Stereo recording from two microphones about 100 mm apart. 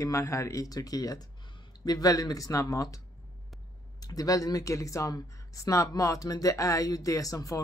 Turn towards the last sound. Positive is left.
turn(degrees=35)  # may be behind; listen again after turning